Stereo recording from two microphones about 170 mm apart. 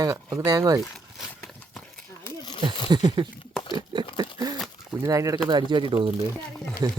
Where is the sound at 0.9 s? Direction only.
Centre (ahead or behind).